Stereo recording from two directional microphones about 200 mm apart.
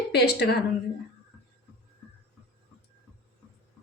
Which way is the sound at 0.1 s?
55° left (ahead or behind).